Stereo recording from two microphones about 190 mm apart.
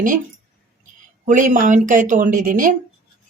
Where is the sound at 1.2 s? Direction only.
45° right (ahead or behind).